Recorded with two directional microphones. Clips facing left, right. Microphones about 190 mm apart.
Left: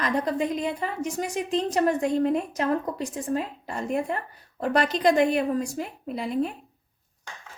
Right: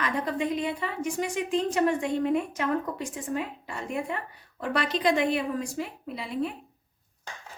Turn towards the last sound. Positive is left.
turn(degrees=45)  # may be behind; listen again after turning